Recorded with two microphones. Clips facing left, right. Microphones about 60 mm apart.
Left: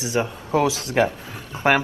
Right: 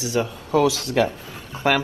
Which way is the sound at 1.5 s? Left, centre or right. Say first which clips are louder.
Left 2 dB; left.